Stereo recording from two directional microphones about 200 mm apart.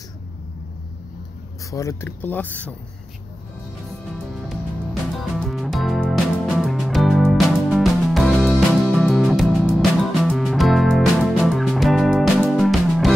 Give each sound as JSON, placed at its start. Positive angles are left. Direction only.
{"t": 1.7, "sound": "speech", "side_deg": 15}
{"t": 5.3, "sound": "music", "side_deg": 0}